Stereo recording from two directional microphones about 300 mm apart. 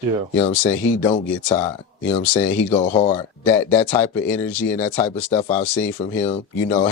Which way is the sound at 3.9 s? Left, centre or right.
Centre.